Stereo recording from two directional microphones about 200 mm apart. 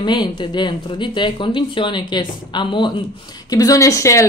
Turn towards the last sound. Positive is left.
turn(degrees=15)  # may be behind; listen again after turning